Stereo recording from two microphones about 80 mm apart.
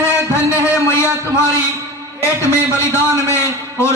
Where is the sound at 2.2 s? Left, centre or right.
Left.